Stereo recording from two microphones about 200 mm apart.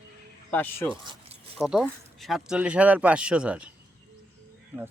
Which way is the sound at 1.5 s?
Centre (ahead or behind).